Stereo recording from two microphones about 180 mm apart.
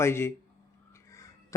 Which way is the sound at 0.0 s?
15° left (ahead or behind).